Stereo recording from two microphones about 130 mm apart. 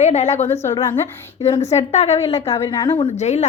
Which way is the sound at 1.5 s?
55° left (ahead or behind).